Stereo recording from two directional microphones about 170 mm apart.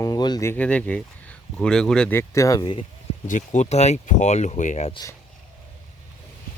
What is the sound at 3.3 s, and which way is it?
Speech, 45° left (ahead or behind).